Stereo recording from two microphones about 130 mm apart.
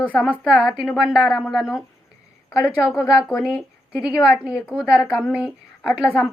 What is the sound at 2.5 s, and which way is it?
Speech, 25° left (ahead or behind).